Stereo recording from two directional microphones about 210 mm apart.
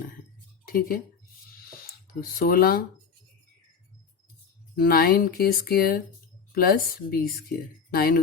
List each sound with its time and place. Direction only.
0.6 s a sound: 45° left (ahead or behind)
2.4 s speech: 45° left (ahead or behind)
4.8 s speech: 45° left (ahead or behind)